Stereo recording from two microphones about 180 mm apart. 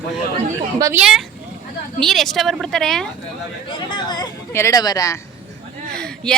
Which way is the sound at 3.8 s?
25° left (ahead or behind).